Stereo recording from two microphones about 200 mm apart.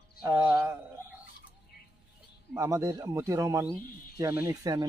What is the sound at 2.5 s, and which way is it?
Speech, 15° right (ahead or behind).